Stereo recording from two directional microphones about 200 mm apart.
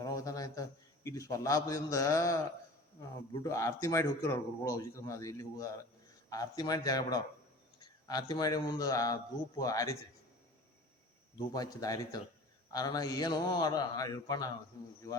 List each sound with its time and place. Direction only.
0.0 s a man's voice: 15° left (ahead or behind)
11.3 s speech: 20° left (ahead or behind)